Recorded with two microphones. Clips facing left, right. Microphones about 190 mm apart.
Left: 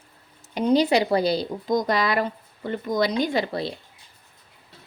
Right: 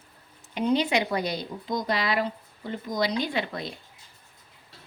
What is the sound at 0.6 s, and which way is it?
Speech, 35° left (ahead or behind).